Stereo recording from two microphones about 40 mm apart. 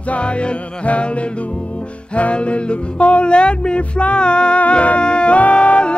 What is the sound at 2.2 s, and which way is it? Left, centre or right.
Music, left.